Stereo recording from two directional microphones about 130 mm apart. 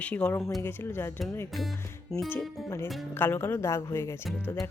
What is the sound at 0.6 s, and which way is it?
Speech, 15° left (ahead or behind).